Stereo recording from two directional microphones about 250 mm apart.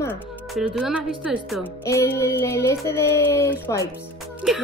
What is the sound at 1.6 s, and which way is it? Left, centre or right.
Music, centre.